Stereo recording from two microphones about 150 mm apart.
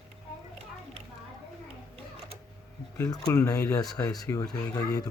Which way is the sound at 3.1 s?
20° left (ahead or behind).